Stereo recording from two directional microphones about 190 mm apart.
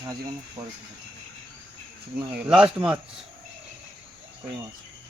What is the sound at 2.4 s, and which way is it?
Speech, 5° right (ahead or behind).